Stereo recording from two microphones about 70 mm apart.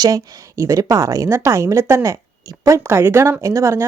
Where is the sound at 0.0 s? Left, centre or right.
Right.